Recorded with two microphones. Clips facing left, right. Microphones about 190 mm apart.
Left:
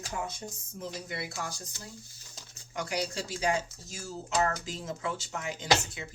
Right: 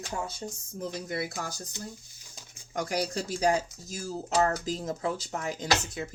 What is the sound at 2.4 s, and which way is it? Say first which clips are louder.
Pigeon: even; 15° right (ahead or behind).